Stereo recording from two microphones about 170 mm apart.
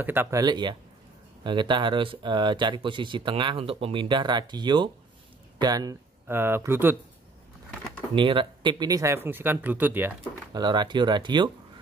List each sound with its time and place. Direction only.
0.0 s speech: 15° right (ahead or behind)
8.1 s speech: 30° right (ahead or behind); by 10.1 s 10° right (ahead or behind)
10.5 s speech: 25° right (ahead or behind)